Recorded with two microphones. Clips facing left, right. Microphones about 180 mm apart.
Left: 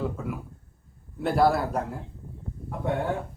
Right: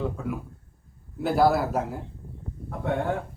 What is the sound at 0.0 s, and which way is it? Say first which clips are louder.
A man's voice: right 1 dB; centre (ahead or behind).